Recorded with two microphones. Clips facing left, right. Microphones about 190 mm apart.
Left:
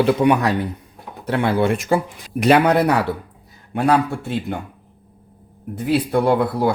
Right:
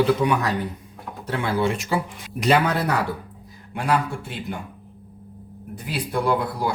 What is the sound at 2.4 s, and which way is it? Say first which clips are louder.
Speech: left 6 dB; 65° left (ahead or behind).